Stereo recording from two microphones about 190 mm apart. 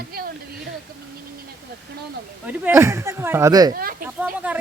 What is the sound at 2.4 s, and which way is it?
Speech, 15° right (ahead or behind).